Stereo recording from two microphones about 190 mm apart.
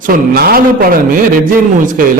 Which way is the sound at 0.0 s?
50° right (ahead or behind).